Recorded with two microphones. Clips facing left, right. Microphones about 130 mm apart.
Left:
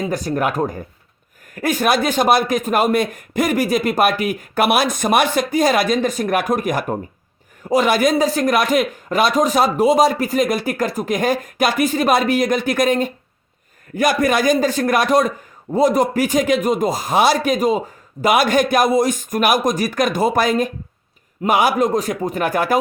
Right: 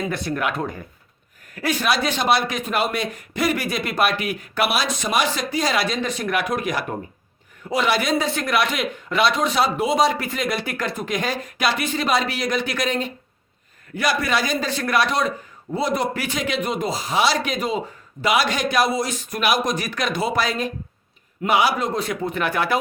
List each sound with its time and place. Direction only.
0.1 s speech: 40° left (ahead or behind)